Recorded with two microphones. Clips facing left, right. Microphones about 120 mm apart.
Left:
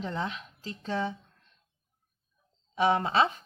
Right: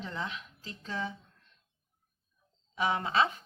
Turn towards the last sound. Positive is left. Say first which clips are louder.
# left 4 dB
turn(degrees=35)  # may be behind; listen again after turning